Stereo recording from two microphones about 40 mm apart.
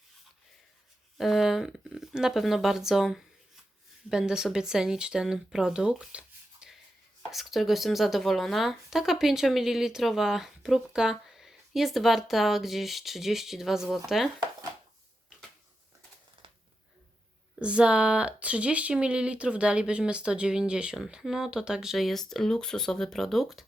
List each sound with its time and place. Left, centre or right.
1.2 s speech: centre
6.1 s a sound: right
7.3 s speech: centre
17.6 s speech: right
21.9 s speech: centre